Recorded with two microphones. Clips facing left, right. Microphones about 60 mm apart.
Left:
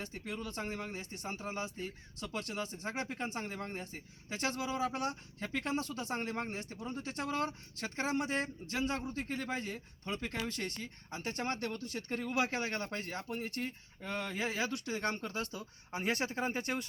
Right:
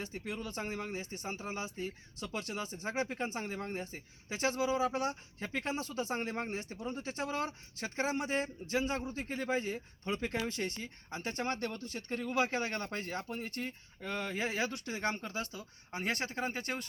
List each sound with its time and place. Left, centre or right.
0.0 s speech: centre
12.1 s speech: centre
14.2 s speech: right
15.2 s speech: centre